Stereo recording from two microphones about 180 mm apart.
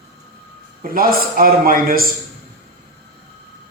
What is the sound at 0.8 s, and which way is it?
A man's voice, 55° right (ahead or behind).